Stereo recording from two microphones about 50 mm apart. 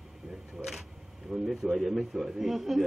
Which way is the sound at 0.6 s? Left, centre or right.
Centre.